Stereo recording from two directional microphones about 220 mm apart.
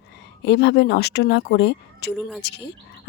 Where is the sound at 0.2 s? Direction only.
50° left (ahead or behind).